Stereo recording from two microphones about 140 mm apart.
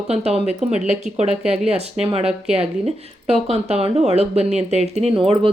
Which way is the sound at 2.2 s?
5° right (ahead or behind).